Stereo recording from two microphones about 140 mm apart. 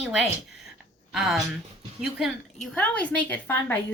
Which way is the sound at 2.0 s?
5° right (ahead or behind).